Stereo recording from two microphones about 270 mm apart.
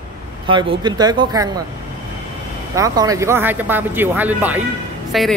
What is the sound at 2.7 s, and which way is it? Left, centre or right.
A man's voice, centre.